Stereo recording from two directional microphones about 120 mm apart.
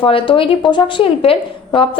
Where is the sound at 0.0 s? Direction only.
45° left (ahead or behind).